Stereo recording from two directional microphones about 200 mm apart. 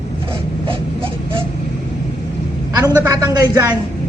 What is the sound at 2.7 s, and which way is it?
A woman's voice, 20° right (ahead or behind).